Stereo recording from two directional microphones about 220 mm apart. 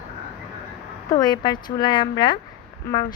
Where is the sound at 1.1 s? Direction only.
20° left (ahead or behind).